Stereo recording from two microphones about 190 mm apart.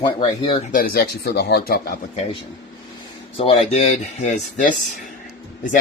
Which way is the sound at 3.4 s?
30° left (ahead or behind).